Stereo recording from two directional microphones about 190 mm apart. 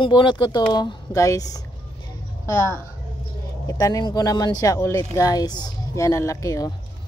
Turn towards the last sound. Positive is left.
turn(degrees=15)  # may be behind; listen again after turning